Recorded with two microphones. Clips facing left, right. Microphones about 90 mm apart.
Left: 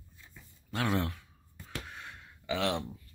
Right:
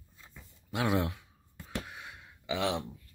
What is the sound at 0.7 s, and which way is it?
Speech, 15° right (ahead or behind).